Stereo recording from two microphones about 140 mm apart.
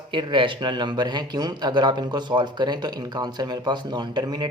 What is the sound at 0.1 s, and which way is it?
Speech, 35° right (ahead or behind).